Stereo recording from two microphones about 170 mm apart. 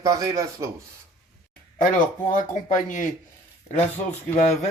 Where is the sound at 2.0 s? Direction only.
50° left (ahead or behind).